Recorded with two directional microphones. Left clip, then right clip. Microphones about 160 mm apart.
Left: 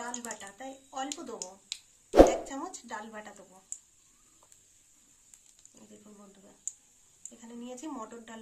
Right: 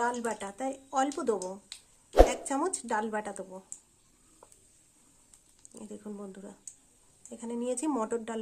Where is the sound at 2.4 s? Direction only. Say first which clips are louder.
Right 8 dB; 90° right.